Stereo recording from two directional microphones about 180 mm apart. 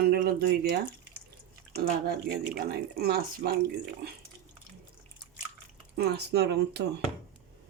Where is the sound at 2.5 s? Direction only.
60° right (ahead or behind).